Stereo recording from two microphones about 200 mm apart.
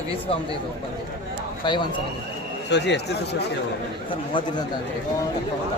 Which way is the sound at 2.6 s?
60° left (ahead or behind).